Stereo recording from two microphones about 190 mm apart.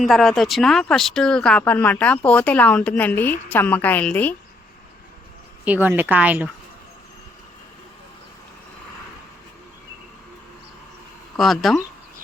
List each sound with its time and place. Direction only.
0.0 s a woman's voice: centre (ahead or behind)
5.6 s speech: 10° right (ahead or behind)
11.3 s speech: centre (ahead or behind)